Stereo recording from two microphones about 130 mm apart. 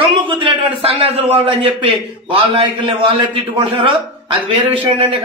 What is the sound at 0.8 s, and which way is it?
A man's voice, 45° right (ahead or behind).